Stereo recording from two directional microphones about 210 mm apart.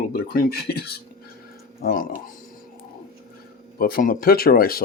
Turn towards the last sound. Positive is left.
turn(degrees=45)  # may be behind; listen again after turning